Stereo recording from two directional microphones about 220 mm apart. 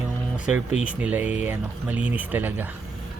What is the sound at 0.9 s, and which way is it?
Speech, 5° right (ahead or behind).